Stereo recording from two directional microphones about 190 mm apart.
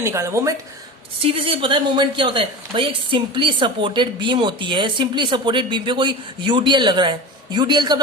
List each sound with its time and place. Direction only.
0.0 s speech: 15° right (ahead or behind)
1.2 s a woman's voice: 30° right (ahead or behind)